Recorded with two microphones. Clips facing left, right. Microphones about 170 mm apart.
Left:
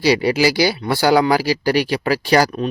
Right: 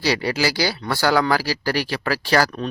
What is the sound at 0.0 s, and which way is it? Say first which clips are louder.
A man's voice: left 6 dB; 15° left (ahead or behind).